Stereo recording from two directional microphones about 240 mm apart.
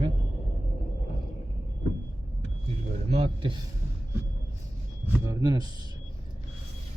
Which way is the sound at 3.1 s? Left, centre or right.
Right.